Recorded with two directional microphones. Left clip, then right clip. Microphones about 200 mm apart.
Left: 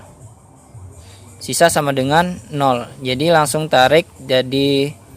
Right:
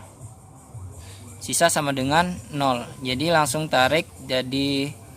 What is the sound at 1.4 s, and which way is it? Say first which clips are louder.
A man's voice: left 7 dB; 35° left (ahead or behind).